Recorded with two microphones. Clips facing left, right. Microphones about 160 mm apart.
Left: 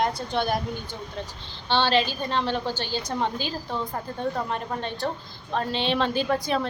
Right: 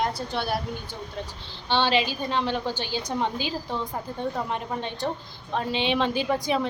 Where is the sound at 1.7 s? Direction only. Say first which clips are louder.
Left 1 dB; 10° right (ahead or behind).